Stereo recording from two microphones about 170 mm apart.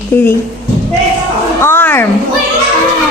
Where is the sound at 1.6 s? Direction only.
15° left (ahead or behind).